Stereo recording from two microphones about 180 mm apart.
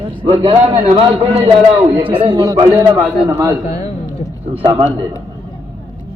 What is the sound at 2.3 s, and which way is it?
A man's voice, 20° right (ahead or behind).